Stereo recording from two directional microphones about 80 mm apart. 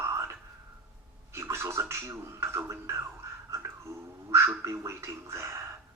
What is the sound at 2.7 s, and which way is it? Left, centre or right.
Speech, right.